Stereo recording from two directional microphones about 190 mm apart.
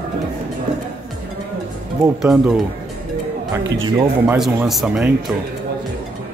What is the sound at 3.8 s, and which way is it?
Speech, 25° right (ahead or behind).